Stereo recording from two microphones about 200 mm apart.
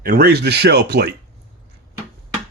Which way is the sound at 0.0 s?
50° right (ahead or behind).